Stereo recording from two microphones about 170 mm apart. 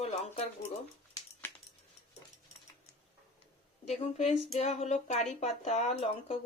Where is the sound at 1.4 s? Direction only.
15° left (ahead or behind).